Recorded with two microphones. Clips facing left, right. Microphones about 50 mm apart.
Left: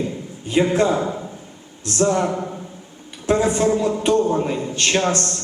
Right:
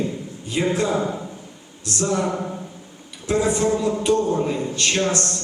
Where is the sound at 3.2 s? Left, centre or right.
Left.